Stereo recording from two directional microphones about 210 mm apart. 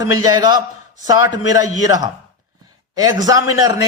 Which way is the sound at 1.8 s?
15° right (ahead or behind).